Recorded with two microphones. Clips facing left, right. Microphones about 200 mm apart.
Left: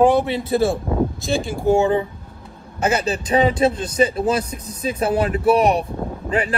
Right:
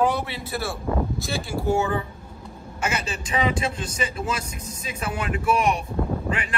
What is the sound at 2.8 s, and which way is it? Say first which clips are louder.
A man's voice: left 8 dB; 35° left (ahead or behind).